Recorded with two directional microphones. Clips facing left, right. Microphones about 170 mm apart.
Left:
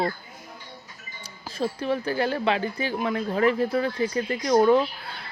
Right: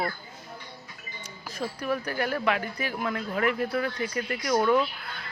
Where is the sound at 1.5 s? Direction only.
30° left (ahead or behind).